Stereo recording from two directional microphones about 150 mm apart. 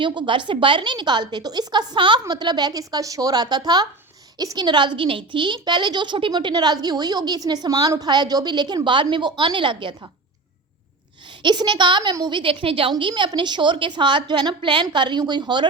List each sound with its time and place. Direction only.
0.0 s a woman's voice: 30° right (ahead or behind)
11.4 s a woman's voice: 30° right (ahead or behind)